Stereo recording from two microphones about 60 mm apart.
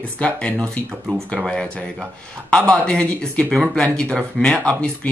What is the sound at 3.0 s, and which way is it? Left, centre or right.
Speech, left.